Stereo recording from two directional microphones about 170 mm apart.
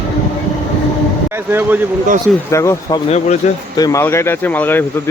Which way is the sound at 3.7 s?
20° left (ahead or behind).